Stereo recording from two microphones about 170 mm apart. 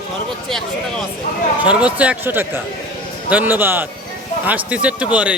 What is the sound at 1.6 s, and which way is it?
A man's voice, 10° right (ahead or behind).